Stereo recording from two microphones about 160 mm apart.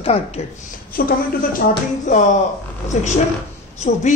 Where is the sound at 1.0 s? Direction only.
65° left (ahead or behind).